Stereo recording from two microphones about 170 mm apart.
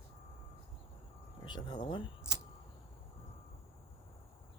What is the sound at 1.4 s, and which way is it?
Speech, 25° left (ahead or behind).